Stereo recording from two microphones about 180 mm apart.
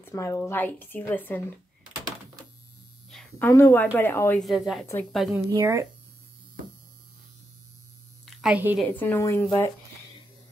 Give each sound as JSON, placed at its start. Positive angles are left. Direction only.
{"t": 0.0, "sound": "speech", "side_deg": 15}
{"t": 3.1, "sound": "a sound", "side_deg": 0}
{"t": 3.4, "sound": "speech", "side_deg": 15}
{"t": 4.4, "sound": "a woman's voice", "side_deg": 0}
{"t": 5.3, "sound": "speech", "side_deg": -15}
{"t": 8.3, "sound": "a sound", "side_deg": 0}
{"t": 8.7, "sound": "speech", "side_deg": 10}